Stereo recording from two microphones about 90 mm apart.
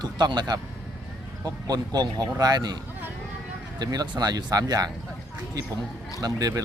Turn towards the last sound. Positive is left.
turn(degrees=-45)  # may be behind; listen again after turning